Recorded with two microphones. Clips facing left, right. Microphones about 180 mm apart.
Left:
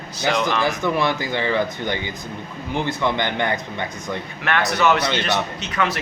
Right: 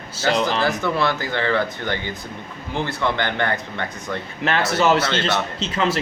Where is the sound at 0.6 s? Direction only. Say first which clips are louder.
Even; 15° left (ahead or behind).